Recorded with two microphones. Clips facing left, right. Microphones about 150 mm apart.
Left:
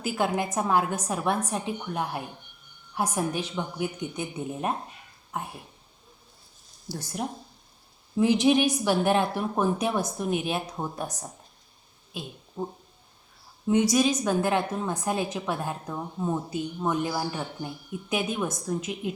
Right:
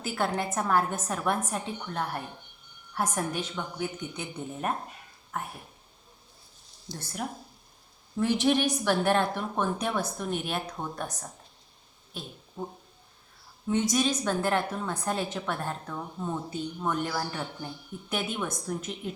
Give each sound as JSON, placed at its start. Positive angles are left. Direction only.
{"t": 0.1, "sound": "speech", "side_deg": 15}
{"t": 6.9, "sound": "speech", "side_deg": -20}
{"t": 8.1, "sound": "a woman's voice", "side_deg": 10}
{"t": 12.6, "sound": "speech", "side_deg": 15}